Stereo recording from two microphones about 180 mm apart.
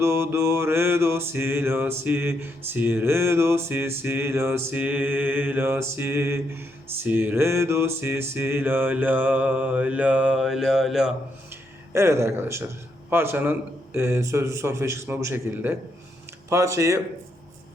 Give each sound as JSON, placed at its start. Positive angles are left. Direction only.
{"t": 0.0, "sound": "mantra", "side_deg": -15}
{"t": 11.9, "sound": "mantra", "side_deg": -15}